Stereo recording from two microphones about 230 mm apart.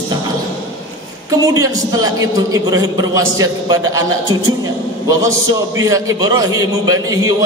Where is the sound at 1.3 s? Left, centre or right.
Centre.